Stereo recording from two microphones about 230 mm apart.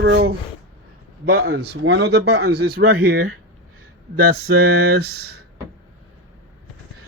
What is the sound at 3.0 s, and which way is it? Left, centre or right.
Speech, right.